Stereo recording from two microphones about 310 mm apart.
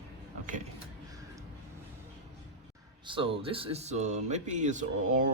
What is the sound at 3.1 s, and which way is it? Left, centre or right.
Speech, centre.